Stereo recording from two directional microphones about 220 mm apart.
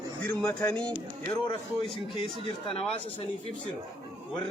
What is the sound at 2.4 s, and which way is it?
Speech, 25° left (ahead or behind).